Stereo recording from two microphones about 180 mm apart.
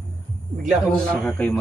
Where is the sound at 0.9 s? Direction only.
5° left (ahead or behind).